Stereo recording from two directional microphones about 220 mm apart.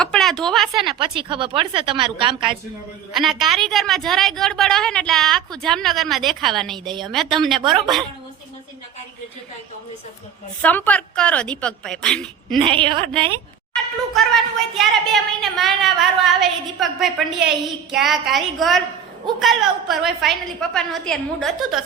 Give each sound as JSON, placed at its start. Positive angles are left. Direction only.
{"t": 0.0, "sound": "a woman's voice", "side_deg": 0}
{"t": 0.8, "sound": "a woman's voice", "side_deg": -20}
{"t": 3.1, "sound": "a woman's voice", "side_deg": 0}
{"t": 7.6, "sound": "a woman's voice", "side_deg": -20}
{"t": 10.6, "sound": "a woman's voice", "side_deg": 5}
{"t": 12.5, "sound": "a woman's voice", "side_deg": -25}
{"t": 14.1, "sound": "a woman's voice", "side_deg": 0}